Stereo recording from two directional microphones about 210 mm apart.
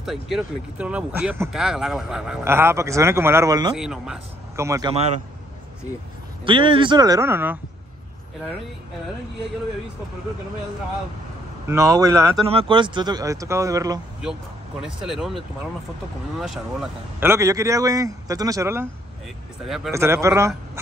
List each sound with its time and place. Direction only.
0.0 s speech: centre (ahead or behind); by 3.7 s 15° right (ahead or behind)
3.7 s speech: centre (ahead or behind)
4.6 s speech: 15° right (ahead or behind)
6.4 s speech: 25° right (ahead or behind)
11.6 s speech: 15° right (ahead or behind)
14.8 s speech: 5° right (ahead or behind)
19.9 s speech: 15° right (ahead or behind)